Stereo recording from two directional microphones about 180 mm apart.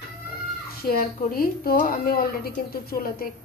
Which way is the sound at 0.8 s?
55° left (ahead or behind).